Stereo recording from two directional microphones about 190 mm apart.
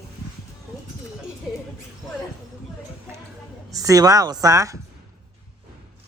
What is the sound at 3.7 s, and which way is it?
A woman's voice, 20° right (ahead or behind).